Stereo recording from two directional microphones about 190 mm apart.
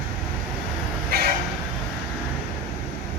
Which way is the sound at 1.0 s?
55° right (ahead or behind).